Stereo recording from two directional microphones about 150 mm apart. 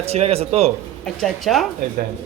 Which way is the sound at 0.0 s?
45° right (ahead or behind).